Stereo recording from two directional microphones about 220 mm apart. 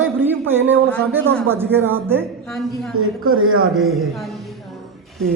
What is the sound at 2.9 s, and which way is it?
Speech, 75° right (ahead or behind).